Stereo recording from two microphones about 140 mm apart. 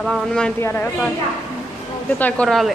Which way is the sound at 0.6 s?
15° left (ahead or behind).